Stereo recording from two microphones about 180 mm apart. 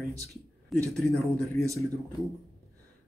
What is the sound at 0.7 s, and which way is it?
Speech, 5° left (ahead or behind).